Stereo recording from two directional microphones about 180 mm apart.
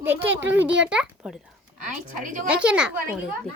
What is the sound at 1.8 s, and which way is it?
Speech, 45° right (ahead or behind).